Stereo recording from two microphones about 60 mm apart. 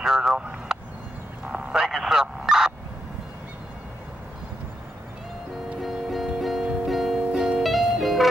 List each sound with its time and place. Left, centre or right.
0.0 s vehicle: centre
0.7 s a sound: centre
1.4 s vehicle: centre
1.8 s a sound: centre
5.8 s music: centre
7.6 s music: centre